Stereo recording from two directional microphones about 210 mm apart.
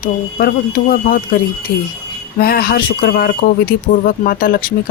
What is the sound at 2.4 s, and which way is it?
Speech, 45° left (ahead or behind).